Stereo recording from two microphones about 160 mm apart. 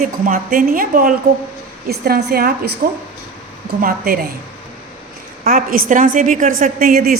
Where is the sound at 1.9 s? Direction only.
80° right.